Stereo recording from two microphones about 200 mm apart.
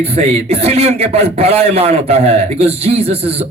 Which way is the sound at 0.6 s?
30° right (ahead or behind).